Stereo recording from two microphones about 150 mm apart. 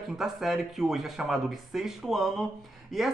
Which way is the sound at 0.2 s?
Centre (ahead or behind).